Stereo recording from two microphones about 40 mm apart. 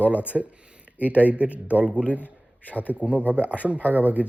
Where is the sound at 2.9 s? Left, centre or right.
Right.